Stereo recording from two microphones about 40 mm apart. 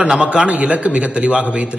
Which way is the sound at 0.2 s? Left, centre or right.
Right.